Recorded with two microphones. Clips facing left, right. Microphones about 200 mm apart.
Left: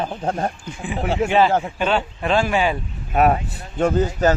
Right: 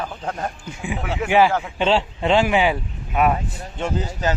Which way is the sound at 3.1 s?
40° left (ahead or behind).